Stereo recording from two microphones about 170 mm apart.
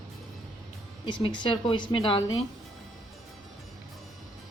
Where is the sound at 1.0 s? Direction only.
30° left (ahead or behind).